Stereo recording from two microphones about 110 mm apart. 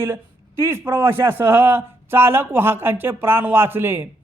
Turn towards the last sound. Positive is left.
turn(degrees=-20)  # may be behind; listen again after turning